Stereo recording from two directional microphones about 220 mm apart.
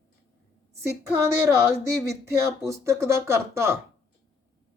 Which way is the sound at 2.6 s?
15° right (ahead or behind).